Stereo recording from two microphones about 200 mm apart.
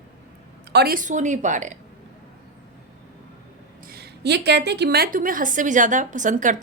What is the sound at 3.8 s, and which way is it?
A woman's voice, 50° right (ahead or behind).